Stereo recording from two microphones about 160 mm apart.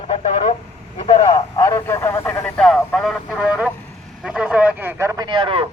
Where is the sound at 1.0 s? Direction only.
35° left (ahead or behind).